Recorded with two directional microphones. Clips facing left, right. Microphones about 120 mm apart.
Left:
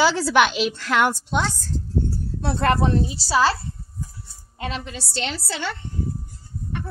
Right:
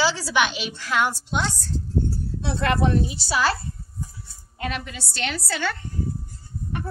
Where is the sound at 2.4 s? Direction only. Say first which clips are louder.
Left 3 dB; 45° left (ahead or behind).